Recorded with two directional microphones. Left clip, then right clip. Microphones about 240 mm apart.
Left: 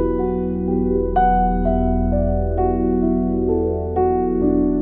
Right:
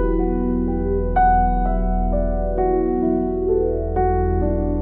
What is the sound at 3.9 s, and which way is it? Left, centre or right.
Music, centre.